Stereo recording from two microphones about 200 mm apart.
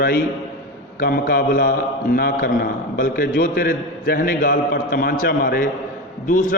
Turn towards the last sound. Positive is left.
turn(degrees=40)  # may be behind; listen again after turning